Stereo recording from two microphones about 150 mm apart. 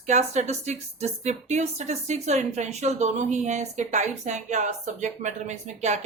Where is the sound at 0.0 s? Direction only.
50° right (ahead or behind).